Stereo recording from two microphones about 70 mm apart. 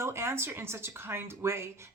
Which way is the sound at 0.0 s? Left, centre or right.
Right.